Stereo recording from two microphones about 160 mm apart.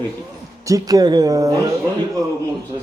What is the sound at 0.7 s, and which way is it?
Speech, 20° right (ahead or behind).